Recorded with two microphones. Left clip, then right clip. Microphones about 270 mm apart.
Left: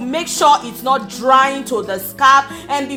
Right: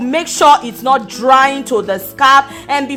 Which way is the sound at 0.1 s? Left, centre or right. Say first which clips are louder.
Right 4 dB; right.